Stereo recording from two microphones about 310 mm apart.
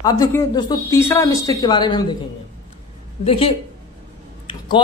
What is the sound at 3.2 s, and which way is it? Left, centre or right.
Speech, centre.